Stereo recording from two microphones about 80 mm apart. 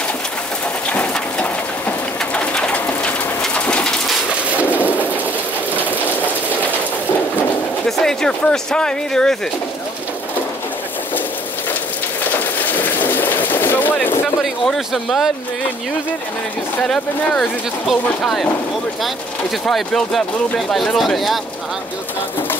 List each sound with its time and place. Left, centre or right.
0.8 s bird: centre
7.3 s a sound: centre
12.3 s a sound: left
14.4 s speech: centre
16.9 s speech: centre
19.6 s speech: centre